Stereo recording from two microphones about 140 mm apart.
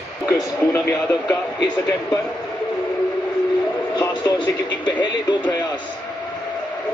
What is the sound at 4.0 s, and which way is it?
Speech, 30° left (ahead or behind).